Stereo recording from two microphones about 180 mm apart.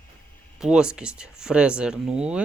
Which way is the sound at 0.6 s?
5° right (ahead or behind).